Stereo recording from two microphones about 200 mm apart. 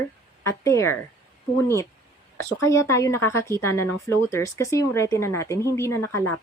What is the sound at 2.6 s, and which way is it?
Speech, 15° left (ahead or behind).